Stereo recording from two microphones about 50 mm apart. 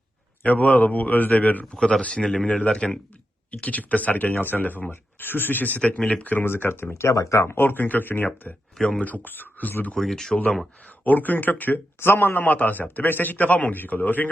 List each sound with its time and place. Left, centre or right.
0.4 s a man's voice: left
1.7 s a man's voice: centre
3.5 s a man's voice: left
6.1 s a man's voice: left
6.3 s speech: left
6.9 s a man's voice: left
9.9 s speech: centre
10.8 s a man's voice: left
11.9 s a man's voice: left